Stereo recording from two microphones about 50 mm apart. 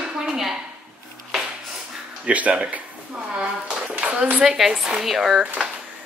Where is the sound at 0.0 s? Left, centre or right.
Centre.